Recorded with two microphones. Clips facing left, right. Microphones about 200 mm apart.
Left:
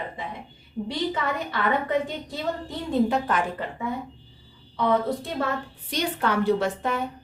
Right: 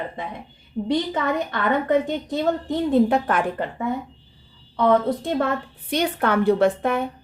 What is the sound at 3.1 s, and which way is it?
Speech, 55° right (ahead or behind).